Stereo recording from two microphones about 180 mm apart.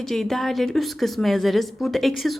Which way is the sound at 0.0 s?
Centre (ahead or behind).